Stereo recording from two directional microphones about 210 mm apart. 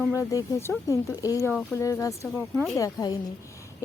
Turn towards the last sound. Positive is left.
turn(degrees=15)  # may be behind; listen again after turning